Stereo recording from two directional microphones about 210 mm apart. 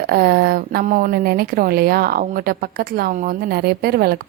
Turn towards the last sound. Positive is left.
turn(degrees=-45)  # may be behind; listen again after turning